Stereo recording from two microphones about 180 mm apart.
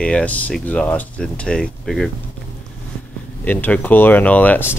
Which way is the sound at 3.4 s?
10° left (ahead or behind).